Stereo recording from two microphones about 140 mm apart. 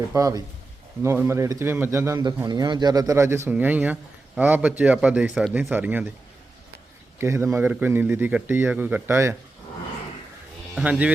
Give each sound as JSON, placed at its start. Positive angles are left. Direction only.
{"t": 0.1, "sound": "a man's voice", "side_deg": -25}
{"t": 7.2, "sound": "a man's voice", "side_deg": -20}
{"t": 10.8, "sound": "a man's voice", "side_deg": -10}